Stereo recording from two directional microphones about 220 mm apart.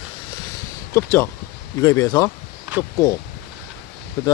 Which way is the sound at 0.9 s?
10° left (ahead or behind).